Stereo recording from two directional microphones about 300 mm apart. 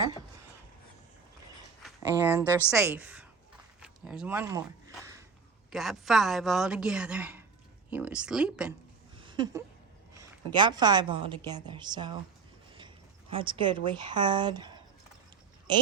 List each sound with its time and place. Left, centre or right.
1.8 s a woman's voice: centre
5.7 s a woman's voice: centre
9.1 s a sound: centre
10.2 s a woman's voice: centre
13.3 s a woman's voice: centre